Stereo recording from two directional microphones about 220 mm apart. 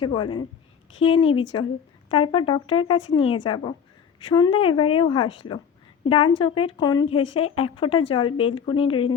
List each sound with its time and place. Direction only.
0.0 s speech: 20° left (ahead or behind)